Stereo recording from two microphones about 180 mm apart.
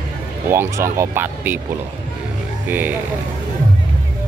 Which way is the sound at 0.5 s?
15° right (ahead or behind).